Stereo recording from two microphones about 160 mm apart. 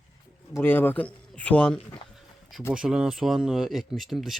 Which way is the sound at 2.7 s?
5° right (ahead or behind).